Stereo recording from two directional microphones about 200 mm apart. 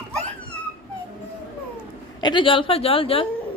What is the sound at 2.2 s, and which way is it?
Speech, 20° left (ahead or behind).